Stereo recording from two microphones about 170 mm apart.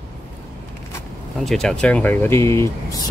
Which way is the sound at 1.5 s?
5° left (ahead or behind).